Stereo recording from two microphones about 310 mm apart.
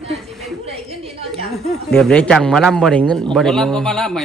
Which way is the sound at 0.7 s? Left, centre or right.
Centre.